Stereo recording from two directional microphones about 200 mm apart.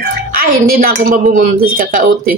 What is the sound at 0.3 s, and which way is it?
Speech, 45° right (ahead or behind).